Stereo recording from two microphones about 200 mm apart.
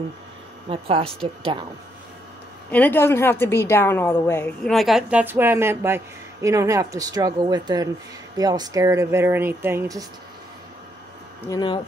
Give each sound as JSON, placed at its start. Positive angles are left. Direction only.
{"t": 0.7, "sound": "speech", "side_deg": -30}
{"t": 2.7, "sound": "a woman's voice", "side_deg": 10}
{"t": 4.7, "sound": "speech", "side_deg": 0}
{"t": 11.4, "sound": "speech", "side_deg": 20}